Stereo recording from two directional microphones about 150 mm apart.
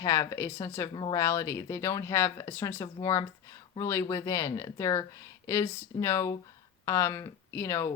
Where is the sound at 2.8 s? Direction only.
25° left (ahead or behind).